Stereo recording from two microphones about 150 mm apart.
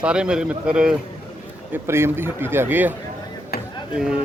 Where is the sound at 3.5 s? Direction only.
90° left.